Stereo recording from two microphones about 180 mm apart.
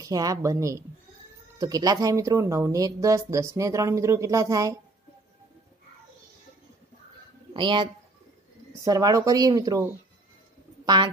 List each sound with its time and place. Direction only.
0.0 s speech: 20° right (ahead or behind)
7.5 s speech: 25° right (ahead or behind)
10.9 s speech: 25° right (ahead or behind)